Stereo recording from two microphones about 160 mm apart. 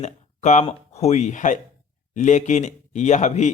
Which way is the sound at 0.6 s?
40° left (ahead or behind).